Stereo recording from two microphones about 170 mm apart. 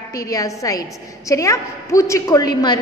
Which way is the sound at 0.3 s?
20° left (ahead or behind).